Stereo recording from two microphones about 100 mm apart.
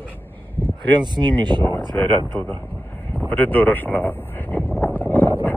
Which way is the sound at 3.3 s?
20° left (ahead or behind).